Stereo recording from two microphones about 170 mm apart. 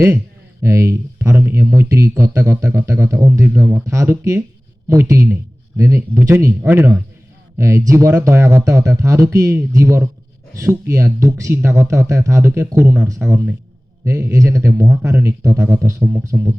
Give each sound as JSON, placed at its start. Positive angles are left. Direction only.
{"t": 0.6, "sound": "speech", "side_deg": -15}